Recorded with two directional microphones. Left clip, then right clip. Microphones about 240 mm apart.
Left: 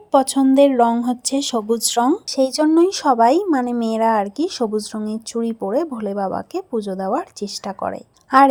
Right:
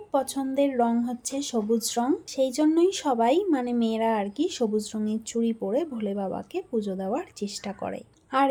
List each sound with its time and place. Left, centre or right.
0.1 s speech: left